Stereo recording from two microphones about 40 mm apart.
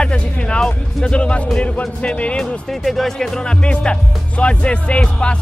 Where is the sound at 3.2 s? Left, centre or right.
Centre.